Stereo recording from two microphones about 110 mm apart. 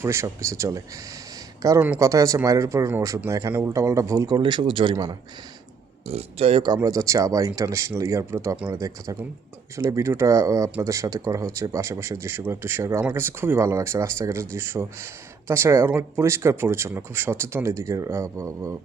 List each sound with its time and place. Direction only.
0.0 s speech: 25° right (ahead or behind)
4.4 s a man's voice: 45° right (ahead or behind)
6.1 s speech: 65° right (ahead or behind)
6.8 s speech: 30° right (ahead or behind)